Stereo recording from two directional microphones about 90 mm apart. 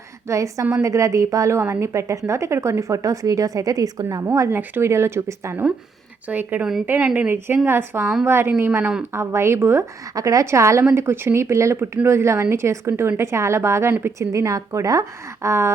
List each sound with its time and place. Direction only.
0.3 s a woman's voice: 35° right (ahead or behind)
4.3 s speech: 30° right (ahead or behind); by 7.3 s 15° right (ahead or behind)
7.4 s speech: 25° right (ahead or behind)
10.2 s a woman's voice: 40° right (ahead or behind)